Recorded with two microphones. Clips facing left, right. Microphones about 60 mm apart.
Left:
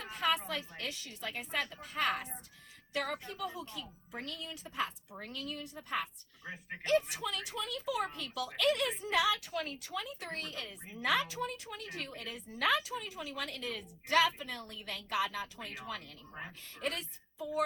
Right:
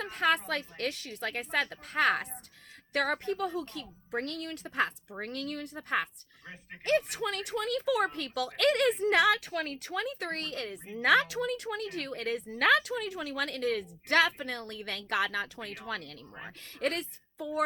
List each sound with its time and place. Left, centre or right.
0.0 s a woman's voice: right
6.4 s speech: centre
6.8 s a woman's voice: right